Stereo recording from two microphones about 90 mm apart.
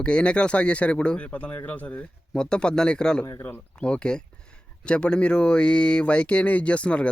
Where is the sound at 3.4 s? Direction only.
25° left (ahead or behind).